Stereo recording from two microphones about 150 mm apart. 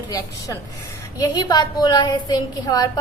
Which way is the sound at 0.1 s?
25° left (ahead or behind).